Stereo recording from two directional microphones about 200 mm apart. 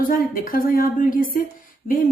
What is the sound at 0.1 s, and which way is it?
A woman's voice, 45° left (ahead or behind).